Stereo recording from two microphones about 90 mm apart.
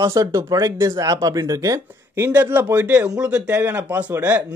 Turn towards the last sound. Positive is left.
turn(degrees=-20)  # may be behind; listen again after turning